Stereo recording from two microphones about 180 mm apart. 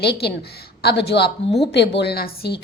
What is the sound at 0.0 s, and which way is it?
A woman's voice, 65° left (ahead or behind).